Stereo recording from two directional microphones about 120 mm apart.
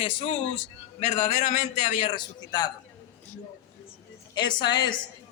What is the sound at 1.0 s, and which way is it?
A man's voice, 90° left.